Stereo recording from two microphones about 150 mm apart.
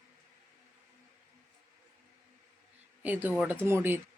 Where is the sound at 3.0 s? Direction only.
10° right (ahead or behind).